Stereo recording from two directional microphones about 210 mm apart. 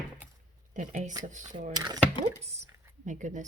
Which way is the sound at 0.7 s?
35° right (ahead or behind).